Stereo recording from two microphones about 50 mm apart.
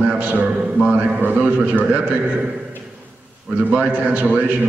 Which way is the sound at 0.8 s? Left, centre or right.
Right.